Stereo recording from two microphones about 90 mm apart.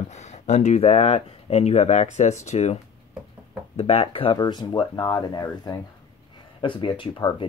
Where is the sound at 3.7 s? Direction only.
90° left.